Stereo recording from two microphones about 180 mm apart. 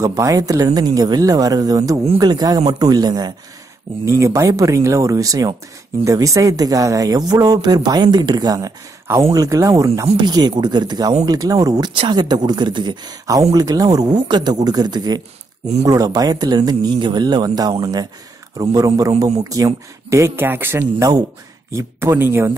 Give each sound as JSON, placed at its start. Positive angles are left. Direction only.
{"t": 0.0, "sound": "speech", "side_deg": -20}